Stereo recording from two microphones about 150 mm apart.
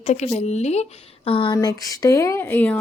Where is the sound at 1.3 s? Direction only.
35° left (ahead or behind).